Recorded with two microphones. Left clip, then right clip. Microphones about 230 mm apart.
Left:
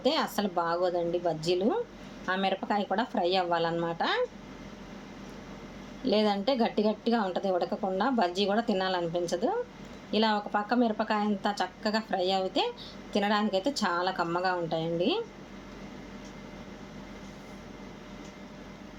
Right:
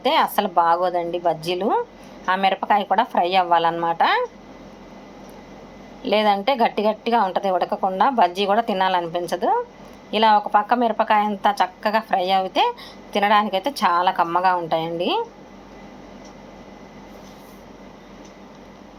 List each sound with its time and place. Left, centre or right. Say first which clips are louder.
0.0 s speech: right 10 dB; centre
2.2 s speech: right 10 dB; centre
6.1 s speech: right 9 dB; centre
14.8 s speech: right 6 dB; centre